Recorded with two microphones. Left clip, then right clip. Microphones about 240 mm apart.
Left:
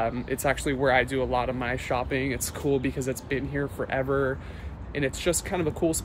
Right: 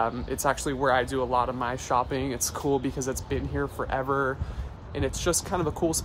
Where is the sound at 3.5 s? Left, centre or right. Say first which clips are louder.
Even; centre.